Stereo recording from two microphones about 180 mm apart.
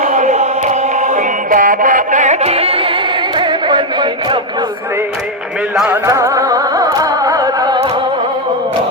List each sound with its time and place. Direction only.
0.0 s music: 45° right (ahead or behind)
3.3 s singing: 25° right (ahead or behind)
5.7 s music: 5° right (ahead or behind)
6.1 s music: 15° right (ahead or behind)